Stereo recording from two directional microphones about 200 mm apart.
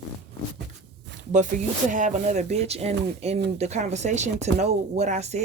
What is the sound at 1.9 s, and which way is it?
Speech, 40° right (ahead or behind).